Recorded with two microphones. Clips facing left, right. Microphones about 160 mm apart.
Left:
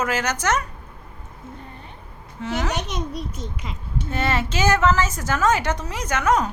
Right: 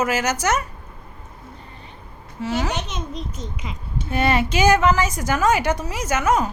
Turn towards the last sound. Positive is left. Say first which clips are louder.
# right 1 dB
turn(degrees=-5)  # may be behind; listen again after turning